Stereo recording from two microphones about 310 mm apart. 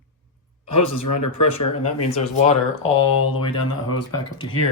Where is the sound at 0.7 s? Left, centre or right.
Left.